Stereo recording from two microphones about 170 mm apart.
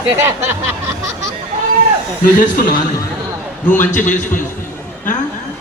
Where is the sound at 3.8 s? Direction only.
50° left (ahead or behind).